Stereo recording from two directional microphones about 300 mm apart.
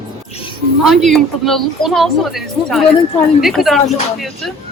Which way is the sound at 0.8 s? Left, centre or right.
Centre.